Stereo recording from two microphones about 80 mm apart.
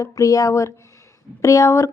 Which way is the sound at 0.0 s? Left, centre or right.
Left.